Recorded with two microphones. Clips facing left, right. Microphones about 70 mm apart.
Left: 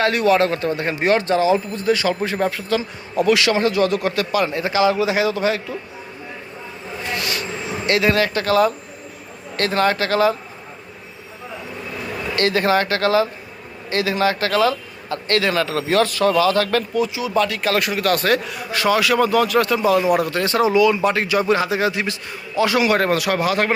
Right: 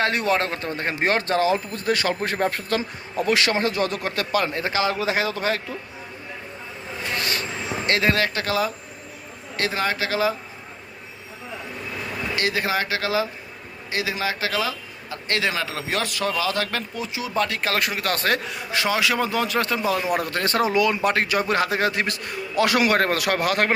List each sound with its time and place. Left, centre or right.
0.0 s a man's voice: right
7.2 s vehicle: right
7.9 s a man's voice: right
9.6 s speech: centre
12.4 s a man's voice: centre
17.0 s a man's voice: right
20.1 s a man's voice: right